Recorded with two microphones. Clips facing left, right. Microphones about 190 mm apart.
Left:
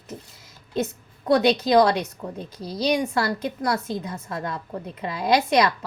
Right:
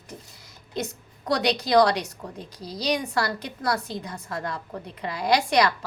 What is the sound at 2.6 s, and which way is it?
Speech, 60° left (ahead or behind).